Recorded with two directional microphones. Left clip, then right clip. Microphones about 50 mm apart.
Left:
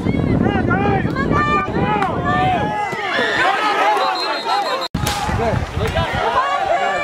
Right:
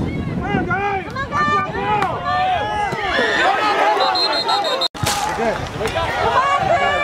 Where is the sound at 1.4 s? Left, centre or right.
Right.